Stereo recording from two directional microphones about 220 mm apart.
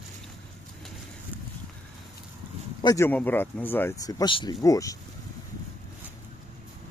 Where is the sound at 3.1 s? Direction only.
10° left (ahead or behind).